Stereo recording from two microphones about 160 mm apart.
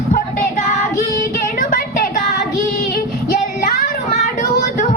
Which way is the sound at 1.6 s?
60° left (ahead or behind).